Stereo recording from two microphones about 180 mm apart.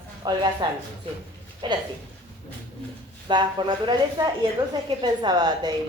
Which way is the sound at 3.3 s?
25° right (ahead or behind).